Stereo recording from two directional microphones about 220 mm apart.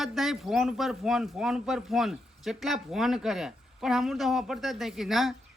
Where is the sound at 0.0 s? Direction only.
Centre (ahead or behind).